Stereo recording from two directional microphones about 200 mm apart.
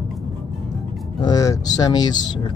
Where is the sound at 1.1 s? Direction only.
20° left (ahead or behind).